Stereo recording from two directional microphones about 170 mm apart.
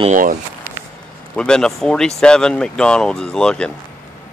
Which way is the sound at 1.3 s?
5° left (ahead or behind).